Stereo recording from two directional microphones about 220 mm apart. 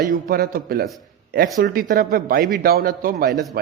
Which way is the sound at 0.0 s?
40° right (ahead or behind).